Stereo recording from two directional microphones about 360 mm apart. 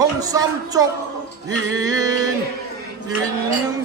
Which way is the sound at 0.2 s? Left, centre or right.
Centre.